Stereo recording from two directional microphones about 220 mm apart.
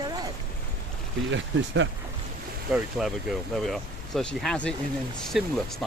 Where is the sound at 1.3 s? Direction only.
55° right (ahead or behind).